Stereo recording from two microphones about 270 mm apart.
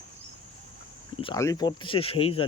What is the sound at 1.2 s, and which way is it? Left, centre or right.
Speech, centre.